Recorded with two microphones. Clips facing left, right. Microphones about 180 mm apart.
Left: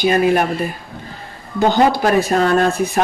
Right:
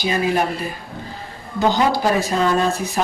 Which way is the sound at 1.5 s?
55° left (ahead or behind).